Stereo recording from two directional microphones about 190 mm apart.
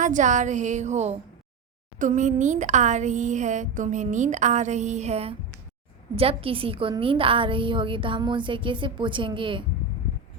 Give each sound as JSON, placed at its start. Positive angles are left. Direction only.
{"t": 0.0, "sound": "a woman's voice", "side_deg": -40}